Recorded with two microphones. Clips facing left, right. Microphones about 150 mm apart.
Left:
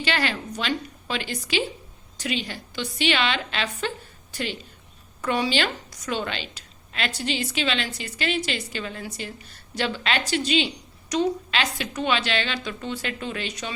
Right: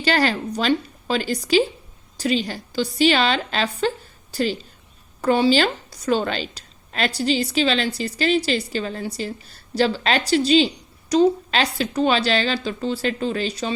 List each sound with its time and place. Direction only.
0.0 s a woman's voice: 40° right (ahead or behind)
3.8 s a sound: 35° right (ahead or behind)
5.2 s a woman's voice: 30° right (ahead or behind)